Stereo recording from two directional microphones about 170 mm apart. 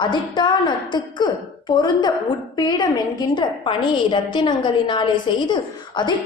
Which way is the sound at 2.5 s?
25° left (ahead or behind).